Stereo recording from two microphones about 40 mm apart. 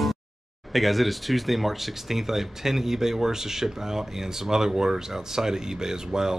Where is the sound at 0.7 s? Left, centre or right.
Centre.